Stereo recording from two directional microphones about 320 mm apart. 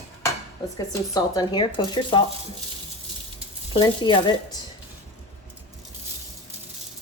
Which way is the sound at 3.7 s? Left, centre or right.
Centre.